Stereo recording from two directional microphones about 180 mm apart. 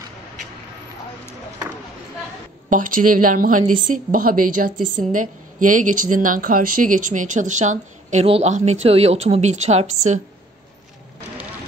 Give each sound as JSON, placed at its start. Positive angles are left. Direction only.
{"t": 2.7, "sound": "speech", "side_deg": -50}